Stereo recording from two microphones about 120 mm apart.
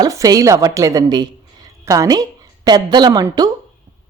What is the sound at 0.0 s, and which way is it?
A woman's voice, 30° right (ahead or behind).